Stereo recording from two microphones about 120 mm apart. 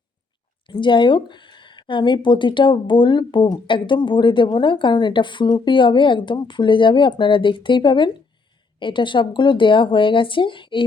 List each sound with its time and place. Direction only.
0.7 s speech: 40° left (ahead or behind)